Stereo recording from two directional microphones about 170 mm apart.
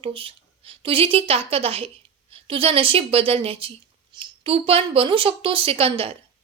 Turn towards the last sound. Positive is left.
turn(degrees=-35)  # may be behind; listen again after turning